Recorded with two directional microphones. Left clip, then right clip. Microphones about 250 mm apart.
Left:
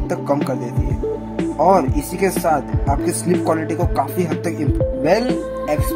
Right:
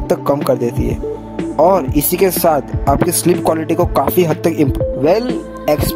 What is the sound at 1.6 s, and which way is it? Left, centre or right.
Speech, right.